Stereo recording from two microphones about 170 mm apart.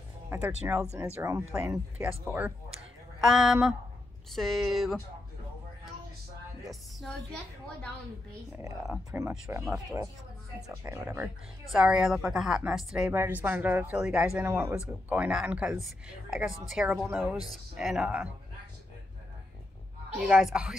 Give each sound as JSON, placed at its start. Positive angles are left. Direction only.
{"t": 0.3, "sound": "a woman's voice", "side_deg": -10}
{"t": 3.2, "sound": "a woman's voice", "side_deg": 0}
{"t": 6.6, "sound": "a woman's voice", "side_deg": 0}
{"t": 9.1, "sound": "a woman's voice", "side_deg": -10}
{"t": 10.8, "sound": "a woman's voice", "side_deg": -15}
{"t": 14.3, "sound": "a woman's voice", "side_deg": -15}
{"t": 20.2, "sound": "a woman's voice", "side_deg": -5}